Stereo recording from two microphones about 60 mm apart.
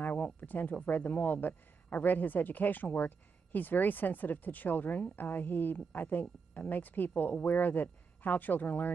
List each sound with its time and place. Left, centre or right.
0.0 s speech: left